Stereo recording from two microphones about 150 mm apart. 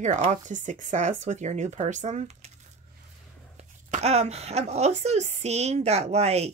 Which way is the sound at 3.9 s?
45° right (ahead or behind).